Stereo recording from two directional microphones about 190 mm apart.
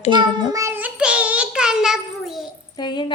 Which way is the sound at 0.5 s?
15° right (ahead or behind).